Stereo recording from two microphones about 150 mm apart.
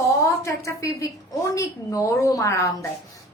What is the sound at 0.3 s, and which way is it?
A woman's voice, 20° left (ahead or behind).